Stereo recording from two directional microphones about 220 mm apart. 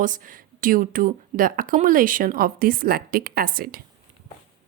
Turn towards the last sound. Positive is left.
turn(degrees=-40)  # may be behind; listen again after turning